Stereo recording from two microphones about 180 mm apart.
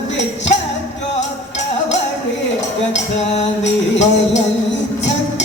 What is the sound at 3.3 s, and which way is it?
Music, 40° left (ahead or behind).